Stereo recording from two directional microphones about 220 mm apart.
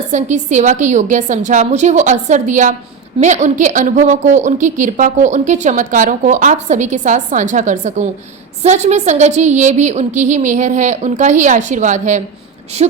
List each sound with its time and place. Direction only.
0.1 s a woman's voice: 30° right (ahead or behind)